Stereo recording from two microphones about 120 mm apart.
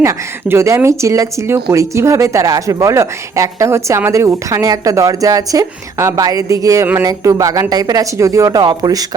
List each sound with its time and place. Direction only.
0.0 s speech: 25° right (ahead or behind)